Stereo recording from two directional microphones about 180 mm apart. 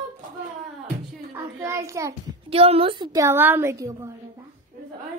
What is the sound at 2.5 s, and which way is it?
A woman's voice, 30° right (ahead or behind).